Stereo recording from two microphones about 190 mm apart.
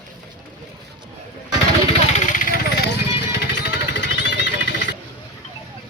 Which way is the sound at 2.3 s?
45° left (ahead or behind).